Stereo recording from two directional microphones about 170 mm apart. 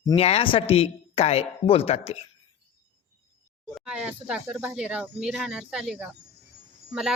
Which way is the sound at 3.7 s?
5° right (ahead or behind).